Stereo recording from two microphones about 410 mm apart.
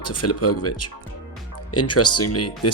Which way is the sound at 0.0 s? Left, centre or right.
Left.